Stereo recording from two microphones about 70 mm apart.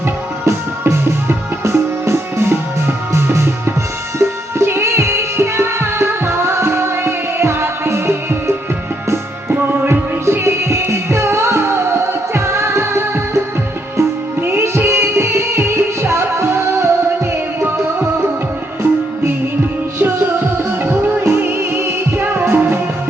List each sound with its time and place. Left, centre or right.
0.4 s music: right
20.0 s music: right